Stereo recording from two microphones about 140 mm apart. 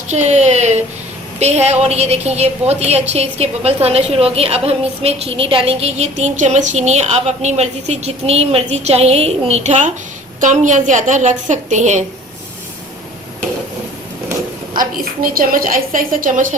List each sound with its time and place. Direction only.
0.1 s a woman's voice: 55° right (ahead or behind)
14.8 s a woman's voice: 85° right; by 16.6 s 70° right (ahead or behind)